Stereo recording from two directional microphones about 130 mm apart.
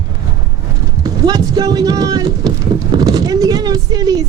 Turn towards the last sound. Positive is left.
turn(degrees=-30)  # may be behind; listen again after turning